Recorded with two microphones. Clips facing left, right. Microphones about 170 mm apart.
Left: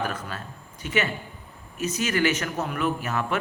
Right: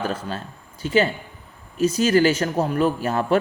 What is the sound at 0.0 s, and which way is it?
A man's voice, 30° right (ahead or behind).